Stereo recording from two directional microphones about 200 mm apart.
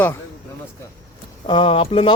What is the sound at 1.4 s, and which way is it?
Speech, 25° left (ahead or behind).